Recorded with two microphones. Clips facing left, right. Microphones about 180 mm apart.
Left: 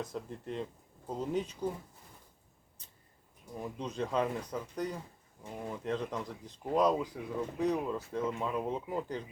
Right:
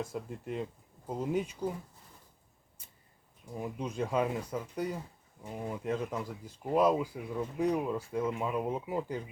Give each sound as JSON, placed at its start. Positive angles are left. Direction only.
{"t": 0.0, "sound": "speech", "side_deg": -10}
{"t": 3.6, "sound": "speech", "side_deg": -10}